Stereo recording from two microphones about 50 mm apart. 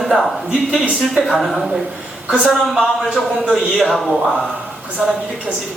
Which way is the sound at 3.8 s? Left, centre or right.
Centre.